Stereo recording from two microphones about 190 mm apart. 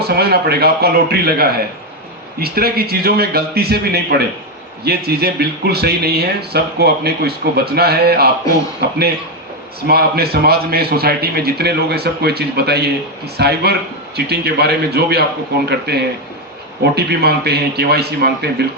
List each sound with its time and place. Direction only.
0.0 s a man's voice: 55° right (ahead or behind)